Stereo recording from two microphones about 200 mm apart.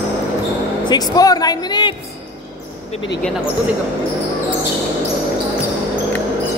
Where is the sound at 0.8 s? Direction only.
20° left (ahead or behind).